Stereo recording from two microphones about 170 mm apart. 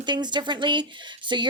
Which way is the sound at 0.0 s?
25° right (ahead or behind).